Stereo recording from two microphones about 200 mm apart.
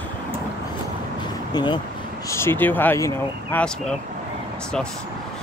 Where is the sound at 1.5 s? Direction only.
20° left (ahead or behind); by 3.9 s 5° left (ahead or behind).